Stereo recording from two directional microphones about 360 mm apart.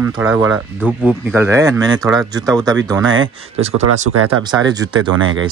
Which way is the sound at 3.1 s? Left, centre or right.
Right.